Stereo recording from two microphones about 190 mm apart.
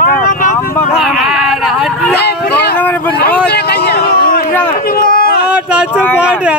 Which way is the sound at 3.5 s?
60° left (ahead or behind).